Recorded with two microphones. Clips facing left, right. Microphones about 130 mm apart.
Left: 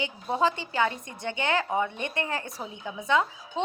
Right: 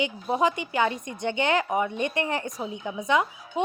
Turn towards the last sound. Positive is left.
turn(degrees=-15)  # may be behind; listen again after turning